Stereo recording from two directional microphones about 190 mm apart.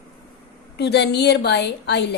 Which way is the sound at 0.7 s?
60° left (ahead or behind).